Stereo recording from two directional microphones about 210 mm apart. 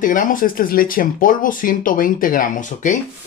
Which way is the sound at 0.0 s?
40° left (ahead or behind).